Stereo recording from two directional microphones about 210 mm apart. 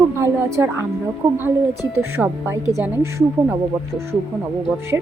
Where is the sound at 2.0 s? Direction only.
10° right (ahead or behind).